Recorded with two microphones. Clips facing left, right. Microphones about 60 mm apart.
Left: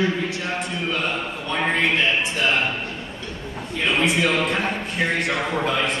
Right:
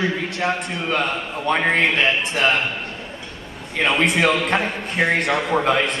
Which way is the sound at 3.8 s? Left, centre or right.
Right.